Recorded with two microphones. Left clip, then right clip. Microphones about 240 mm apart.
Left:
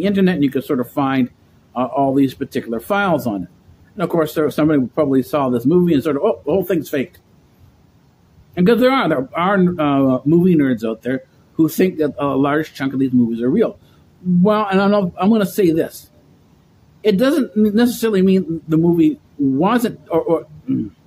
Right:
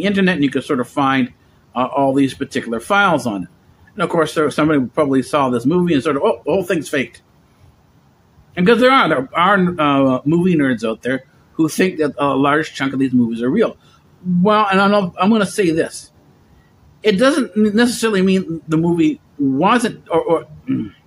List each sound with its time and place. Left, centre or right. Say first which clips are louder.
0.0 s speech: right 1 dB; centre
8.5 s speech: right 3 dB; centre
17.0 s speech: right 1 dB; centre